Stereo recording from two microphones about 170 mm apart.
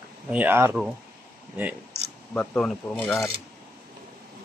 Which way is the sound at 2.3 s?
5° left (ahead or behind).